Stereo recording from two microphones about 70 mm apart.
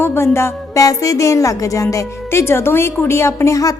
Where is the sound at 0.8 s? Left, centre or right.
Left.